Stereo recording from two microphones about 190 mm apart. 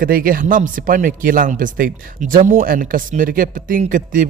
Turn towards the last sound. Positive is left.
turn(degrees=-45)  # may be behind; listen again after turning